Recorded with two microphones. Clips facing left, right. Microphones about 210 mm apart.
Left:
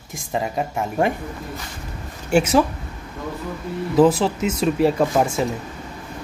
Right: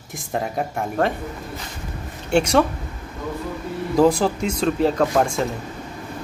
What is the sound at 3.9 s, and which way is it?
Speech, centre (ahead or behind).